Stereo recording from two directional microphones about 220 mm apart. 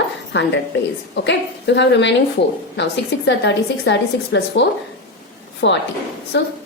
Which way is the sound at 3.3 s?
55° left (ahead or behind).